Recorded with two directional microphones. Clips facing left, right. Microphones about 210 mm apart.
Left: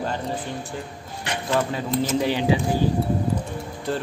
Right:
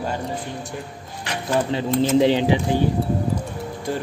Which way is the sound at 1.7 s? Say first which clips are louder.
Right 5 dB; 25° right (ahead or behind).